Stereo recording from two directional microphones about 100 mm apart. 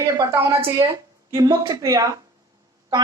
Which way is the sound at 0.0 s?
35° right (ahead or behind).